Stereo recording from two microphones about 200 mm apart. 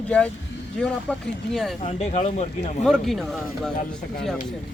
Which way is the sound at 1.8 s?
35° left (ahead or behind).